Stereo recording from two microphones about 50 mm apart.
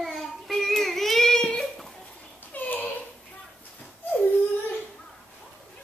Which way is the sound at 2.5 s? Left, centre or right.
Left.